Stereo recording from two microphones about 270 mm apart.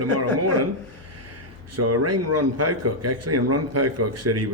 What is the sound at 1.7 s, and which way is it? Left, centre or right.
Speech, right.